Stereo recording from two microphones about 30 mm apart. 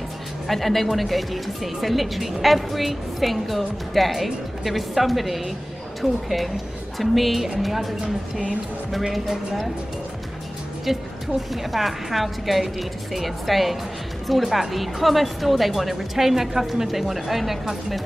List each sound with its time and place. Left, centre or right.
0.5 s speech: centre
10.9 s speech: centre